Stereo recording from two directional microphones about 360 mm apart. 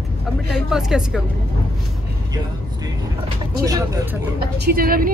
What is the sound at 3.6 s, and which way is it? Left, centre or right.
Speech, centre.